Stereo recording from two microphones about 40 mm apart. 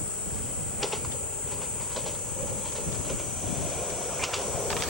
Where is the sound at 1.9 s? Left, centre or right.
Centre.